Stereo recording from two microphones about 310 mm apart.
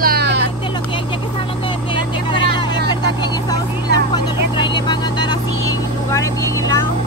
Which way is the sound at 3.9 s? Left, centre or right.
Centre.